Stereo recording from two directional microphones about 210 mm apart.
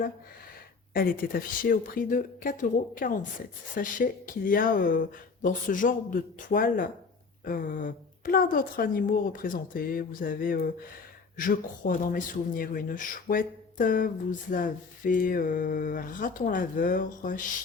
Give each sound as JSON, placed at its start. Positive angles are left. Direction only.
{"t": 0.9, "sound": "speech", "side_deg": 45}